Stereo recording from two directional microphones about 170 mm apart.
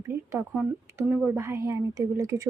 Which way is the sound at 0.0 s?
15° right (ahead or behind).